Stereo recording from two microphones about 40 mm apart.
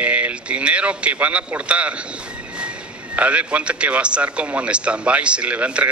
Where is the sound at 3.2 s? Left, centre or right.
Right.